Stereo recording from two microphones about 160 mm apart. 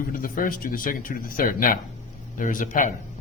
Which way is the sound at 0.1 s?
60° left (ahead or behind).